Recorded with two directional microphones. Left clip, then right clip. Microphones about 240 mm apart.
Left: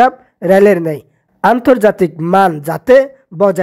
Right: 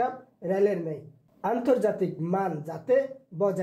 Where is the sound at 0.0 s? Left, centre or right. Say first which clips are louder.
Left 18 dB; left.